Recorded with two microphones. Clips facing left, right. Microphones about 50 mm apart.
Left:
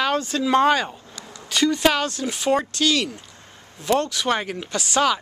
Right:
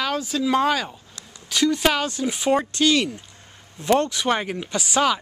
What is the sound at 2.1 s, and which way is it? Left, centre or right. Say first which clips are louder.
Speech: right 1 dB; centre.